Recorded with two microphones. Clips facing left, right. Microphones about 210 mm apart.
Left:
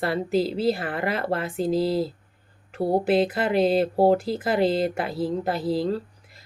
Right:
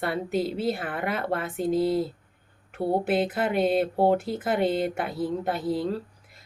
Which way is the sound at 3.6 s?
35° left (ahead or behind).